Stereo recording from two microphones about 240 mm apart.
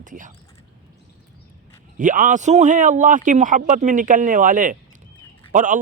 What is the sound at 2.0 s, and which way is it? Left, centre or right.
A man's voice, right.